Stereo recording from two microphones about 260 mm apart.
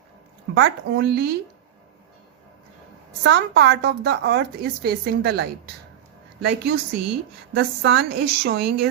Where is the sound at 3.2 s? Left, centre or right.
Right.